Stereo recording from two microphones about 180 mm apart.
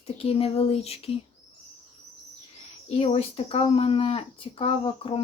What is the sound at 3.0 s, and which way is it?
Speech, 35° left (ahead or behind).